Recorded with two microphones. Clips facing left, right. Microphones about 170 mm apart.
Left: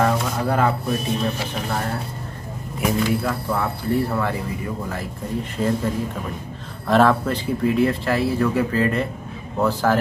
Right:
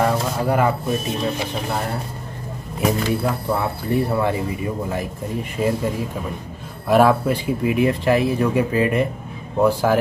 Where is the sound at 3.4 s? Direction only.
20° right (ahead or behind).